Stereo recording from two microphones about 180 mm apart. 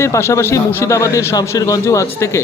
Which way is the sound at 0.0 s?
15° left (ahead or behind).